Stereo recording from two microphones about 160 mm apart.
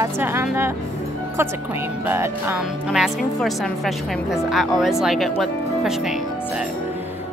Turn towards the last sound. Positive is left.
turn(degrees=-5)  # may be behind; listen again after turning